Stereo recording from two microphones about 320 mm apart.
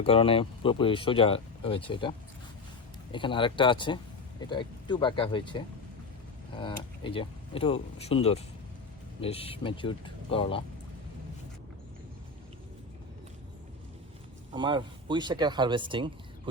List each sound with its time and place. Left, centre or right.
0.0 s speech: centre
14.5 s speech: centre